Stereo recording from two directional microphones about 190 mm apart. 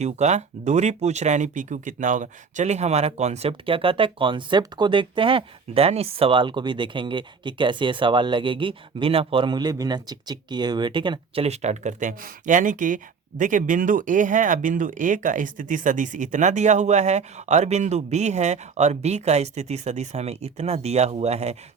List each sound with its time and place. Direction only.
0.0 s speech: 35° right (ahead or behind)